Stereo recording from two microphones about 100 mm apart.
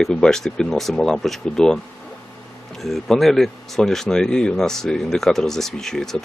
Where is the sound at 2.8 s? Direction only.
5° left (ahead or behind).